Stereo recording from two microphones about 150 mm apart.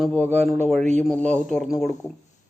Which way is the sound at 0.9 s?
5° left (ahead or behind).